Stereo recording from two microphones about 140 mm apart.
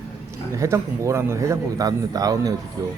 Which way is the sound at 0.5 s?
20° right (ahead or behind).